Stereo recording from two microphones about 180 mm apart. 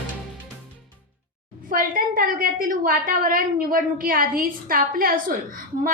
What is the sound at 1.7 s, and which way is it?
A woman's voice, 50° right (ahead or behind).